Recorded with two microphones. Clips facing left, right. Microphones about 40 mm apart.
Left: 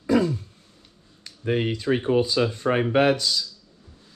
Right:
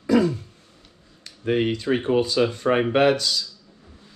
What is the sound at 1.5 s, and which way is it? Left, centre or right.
Speech, right.